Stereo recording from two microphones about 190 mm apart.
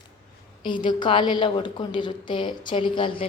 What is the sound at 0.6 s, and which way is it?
A woman's voice, 25° left (ahead or behind).